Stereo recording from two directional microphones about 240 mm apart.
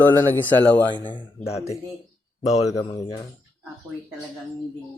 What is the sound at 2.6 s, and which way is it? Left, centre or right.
Speech, centre.